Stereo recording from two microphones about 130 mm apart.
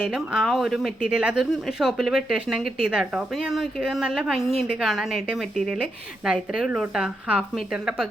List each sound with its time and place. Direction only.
0.1 s speech: 5° right (ahead or behind)